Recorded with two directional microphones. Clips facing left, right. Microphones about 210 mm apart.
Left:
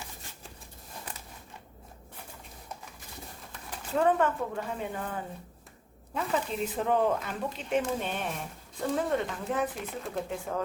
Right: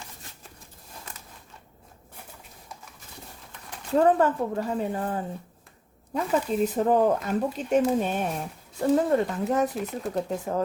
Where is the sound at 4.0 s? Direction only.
35° right (ahead or behind).